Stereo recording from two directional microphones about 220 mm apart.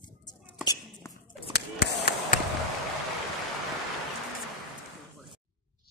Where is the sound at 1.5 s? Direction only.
45° left (ahead or behind).